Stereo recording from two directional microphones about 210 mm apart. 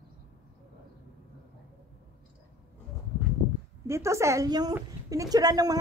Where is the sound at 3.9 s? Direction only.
15° right (ahead or behind).